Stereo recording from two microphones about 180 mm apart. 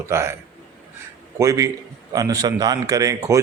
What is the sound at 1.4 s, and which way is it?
Speech, 20° right (ahead or behind).